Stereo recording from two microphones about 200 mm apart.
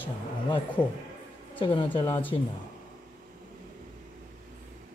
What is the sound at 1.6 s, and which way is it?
Speech, 25° left (ahead or behind).